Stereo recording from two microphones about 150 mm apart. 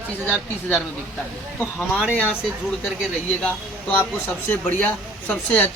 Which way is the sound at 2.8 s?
5° left (ahead or behind).